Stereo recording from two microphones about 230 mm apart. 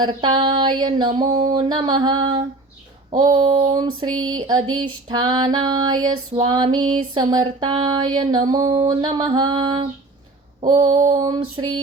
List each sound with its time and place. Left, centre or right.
0.0 s female singing: right
4.2 s a sound: right
5.0 s female singing: right